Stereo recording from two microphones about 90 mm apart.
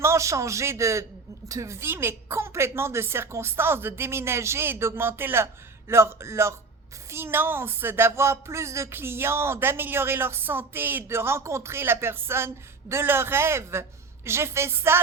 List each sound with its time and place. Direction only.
0.0 s a man's voice: 30° right (ahead or behind)